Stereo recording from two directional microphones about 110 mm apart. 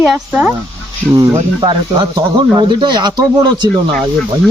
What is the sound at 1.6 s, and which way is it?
Speech, 45° right (ahead or behind).